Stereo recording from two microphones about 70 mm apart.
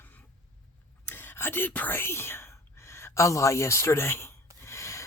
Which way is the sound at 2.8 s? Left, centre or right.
Left.